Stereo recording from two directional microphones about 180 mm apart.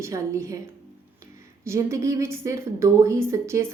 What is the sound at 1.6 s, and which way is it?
A woman's voice, 15° right (ahead or behind).